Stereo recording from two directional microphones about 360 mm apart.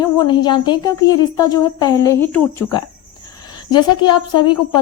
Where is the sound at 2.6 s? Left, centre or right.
Left.